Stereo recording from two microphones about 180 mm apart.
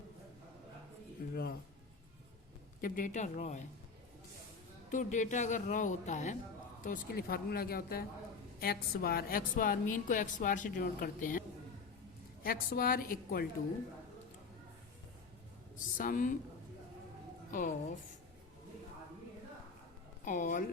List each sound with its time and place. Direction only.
1.3 s speech: 55° left (ahead or behind)
2.8 s a woman's voice: 50° left (ahead or behind)
4.9 s a woman's voice: 40° left (ahead or behind)
6.8 s a woman's voice: 55° left (ahead or behind)
16.0 s a woman's voice: 50° left (ahead or behind)
17.5 s a woman's voice: 45° left (ahead or behind)
20.2 s a woman's voice: 45° left (ahead or behind)